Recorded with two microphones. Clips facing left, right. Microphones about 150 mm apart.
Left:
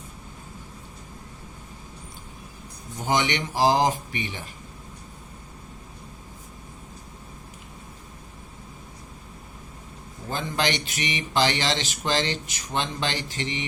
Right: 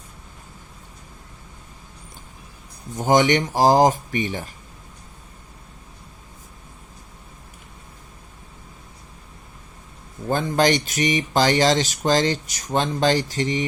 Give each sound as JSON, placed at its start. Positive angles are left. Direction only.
{"t": 3.0, "sound": "speech", "side_deg": -45}
{"t": 10.2, "sound": "speech", "side_deg": -45}